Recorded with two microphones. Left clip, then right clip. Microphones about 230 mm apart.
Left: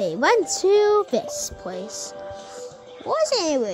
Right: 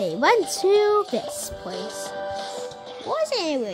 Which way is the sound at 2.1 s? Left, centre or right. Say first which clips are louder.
Right 6 dB; right.